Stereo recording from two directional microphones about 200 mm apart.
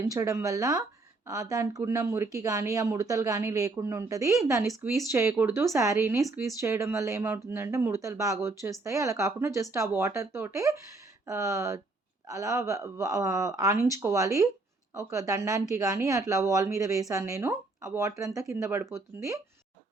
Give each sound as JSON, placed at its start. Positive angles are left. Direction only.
{"t": 0.1, "sound": "a woman's voice", "side_deg": -15}